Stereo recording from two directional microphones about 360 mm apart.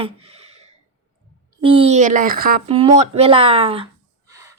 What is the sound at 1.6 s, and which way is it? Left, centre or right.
Speech, right.